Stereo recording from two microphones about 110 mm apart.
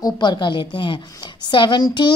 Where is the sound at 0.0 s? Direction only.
40° left (ahead or behind).